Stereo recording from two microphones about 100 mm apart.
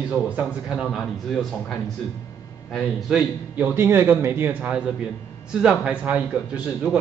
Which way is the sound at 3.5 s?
20° right (ahead or behind).